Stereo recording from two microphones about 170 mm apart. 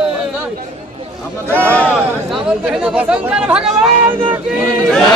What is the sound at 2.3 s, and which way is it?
Speech, 5° right (ahead or behind).